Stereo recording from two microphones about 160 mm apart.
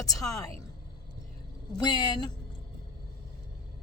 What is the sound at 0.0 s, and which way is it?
Speech, 20° left (ahead or behind).